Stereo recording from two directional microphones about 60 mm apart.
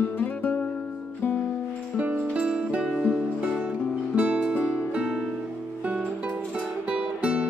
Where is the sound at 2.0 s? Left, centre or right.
Right.